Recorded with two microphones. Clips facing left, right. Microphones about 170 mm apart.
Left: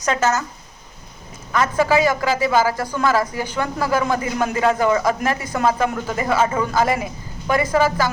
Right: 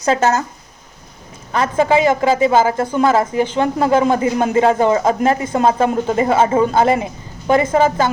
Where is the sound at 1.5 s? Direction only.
25° right (ahead or behind).